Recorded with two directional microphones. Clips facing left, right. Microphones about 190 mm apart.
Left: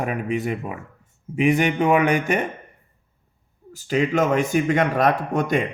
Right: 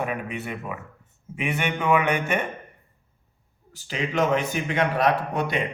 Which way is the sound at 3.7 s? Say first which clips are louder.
Left 6 dB; 45° left (ahead or behind).